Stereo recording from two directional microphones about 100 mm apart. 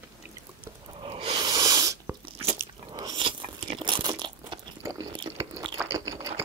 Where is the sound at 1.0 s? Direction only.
70° right (ahead or behind).